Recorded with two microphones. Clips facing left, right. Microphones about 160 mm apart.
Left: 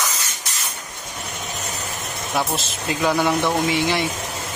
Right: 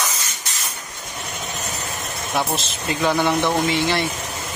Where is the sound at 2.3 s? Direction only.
5° left (ahead or behind).